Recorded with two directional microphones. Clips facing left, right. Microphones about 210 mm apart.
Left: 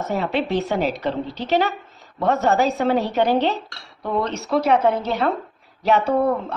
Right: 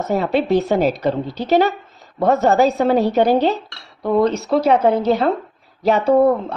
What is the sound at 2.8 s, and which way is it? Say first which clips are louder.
Speech: right 4 dB; 35° right (ahead or behind).